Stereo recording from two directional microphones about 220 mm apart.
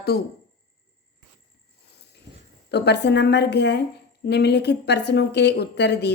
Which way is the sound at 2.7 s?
50° left (ahead or behind).